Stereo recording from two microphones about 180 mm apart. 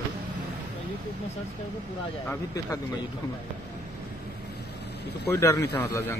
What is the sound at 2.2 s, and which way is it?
Speech, 15° left (ahead or behind).